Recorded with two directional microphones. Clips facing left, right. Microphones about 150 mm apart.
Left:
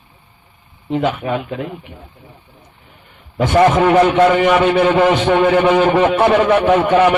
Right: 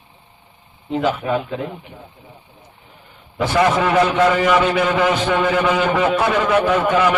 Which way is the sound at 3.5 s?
35° left (ahead or behind).